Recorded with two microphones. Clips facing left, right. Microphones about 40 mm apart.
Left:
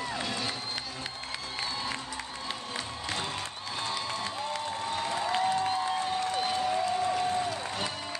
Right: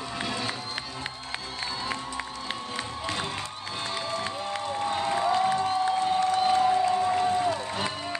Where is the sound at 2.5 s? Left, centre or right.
Right.